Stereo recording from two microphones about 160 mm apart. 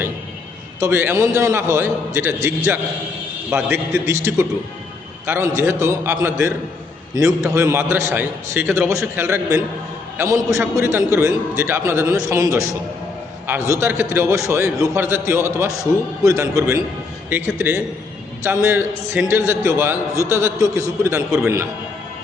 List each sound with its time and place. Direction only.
0.8 s a man's voice: 15° right (ahead or behind)
3.5 s a man's voice: 15° right (ahead or behind)